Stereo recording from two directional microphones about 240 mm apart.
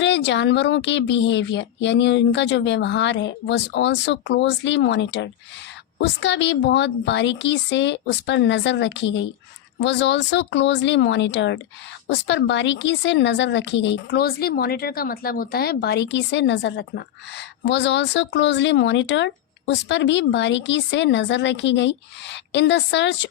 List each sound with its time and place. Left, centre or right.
0.0 s speech: left